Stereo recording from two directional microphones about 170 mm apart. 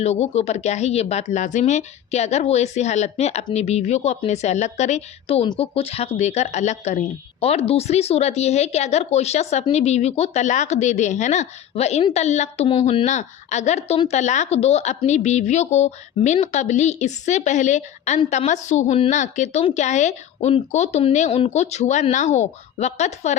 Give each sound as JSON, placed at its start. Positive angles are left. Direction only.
{"t": 0.0, "sound": "a woman's voice", "side_deg": 40}